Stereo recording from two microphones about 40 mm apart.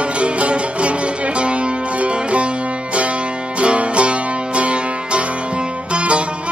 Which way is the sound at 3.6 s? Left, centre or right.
Right.